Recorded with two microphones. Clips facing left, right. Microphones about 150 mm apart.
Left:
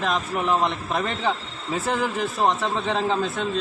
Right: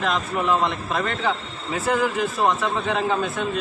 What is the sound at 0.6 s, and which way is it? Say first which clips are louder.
Speech: even; 15° left (ahead or behind).